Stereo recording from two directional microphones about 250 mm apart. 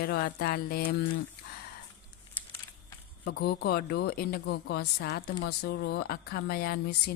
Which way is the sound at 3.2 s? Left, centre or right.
Left.